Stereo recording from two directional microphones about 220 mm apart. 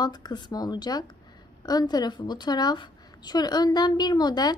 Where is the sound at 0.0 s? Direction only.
20° left (ahead or behind).